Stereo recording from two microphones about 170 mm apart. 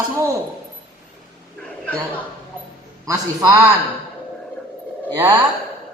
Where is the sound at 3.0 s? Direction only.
20° right (ahead or behind).